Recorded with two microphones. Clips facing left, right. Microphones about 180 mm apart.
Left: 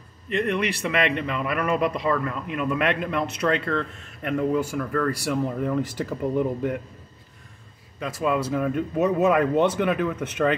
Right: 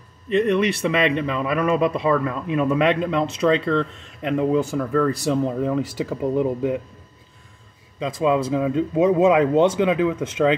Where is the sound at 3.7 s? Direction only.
20° right (ahead or behind).